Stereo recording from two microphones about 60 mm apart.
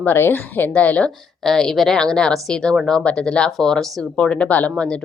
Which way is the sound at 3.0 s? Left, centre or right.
Centre.